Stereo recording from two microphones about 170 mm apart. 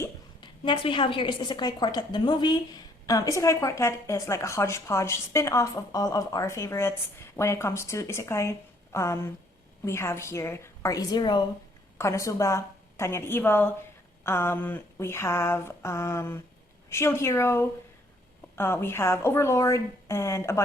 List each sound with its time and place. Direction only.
0.6 s a woman's voice: 30° left (ahead or behind)